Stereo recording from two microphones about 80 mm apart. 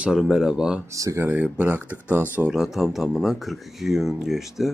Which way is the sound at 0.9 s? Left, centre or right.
Right.